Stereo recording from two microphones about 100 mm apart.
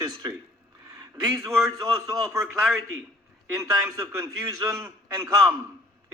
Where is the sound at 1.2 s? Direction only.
30° right (ahead or behind).